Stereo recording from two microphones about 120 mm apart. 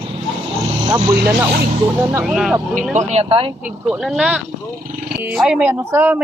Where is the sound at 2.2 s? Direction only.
5° right (ahead or behind).